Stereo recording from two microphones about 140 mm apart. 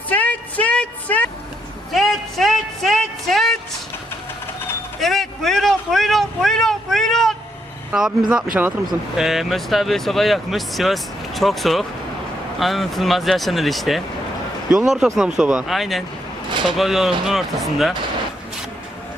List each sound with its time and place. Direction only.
0.1 s a sound: 10° left (ahead or behind)
1.9 s music: centre (ahead or behind)
4.9 s vehicle: centre (ahead or behind)
8.6 s speech: 10° right (ahead or behind)
16.5 s a sound: 35° right (ahead or behind)
16.7 s speech: centre (ahead or behind)